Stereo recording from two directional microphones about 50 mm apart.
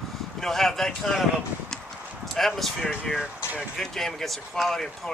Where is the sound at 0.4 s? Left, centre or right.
Centre.